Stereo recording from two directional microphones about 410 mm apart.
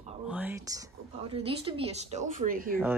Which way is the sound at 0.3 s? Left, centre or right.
Centre.